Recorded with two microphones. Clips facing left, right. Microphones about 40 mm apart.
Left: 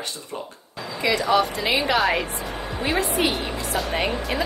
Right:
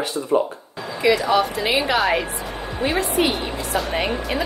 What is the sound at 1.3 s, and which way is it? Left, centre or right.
A woman's voice, centre.